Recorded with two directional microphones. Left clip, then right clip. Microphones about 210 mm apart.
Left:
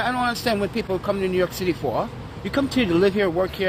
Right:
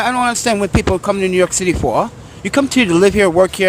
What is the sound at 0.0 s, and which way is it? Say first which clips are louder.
Speech: right 7 dB; 35° right (ahead or behind).